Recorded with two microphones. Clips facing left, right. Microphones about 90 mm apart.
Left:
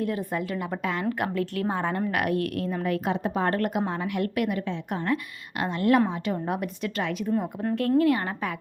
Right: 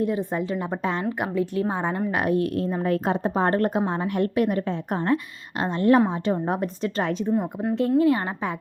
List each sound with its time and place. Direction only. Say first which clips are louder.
0.0 s speech: right 3 dB; 25° right (ahead or behind)
1.2 s a woman's voice: right 3 dB; 20° right (ahead or behind)